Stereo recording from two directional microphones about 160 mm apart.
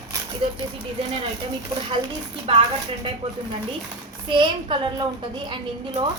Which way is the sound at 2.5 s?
35° right (ahead or behind).